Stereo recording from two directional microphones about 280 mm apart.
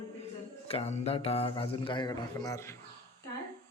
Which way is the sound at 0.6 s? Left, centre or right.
Left.